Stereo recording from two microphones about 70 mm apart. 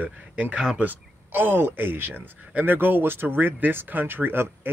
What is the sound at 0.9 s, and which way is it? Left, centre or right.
Speech, right.